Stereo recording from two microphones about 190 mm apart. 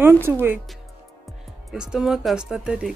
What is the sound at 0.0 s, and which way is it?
Speech, 10° right (ahead or behind).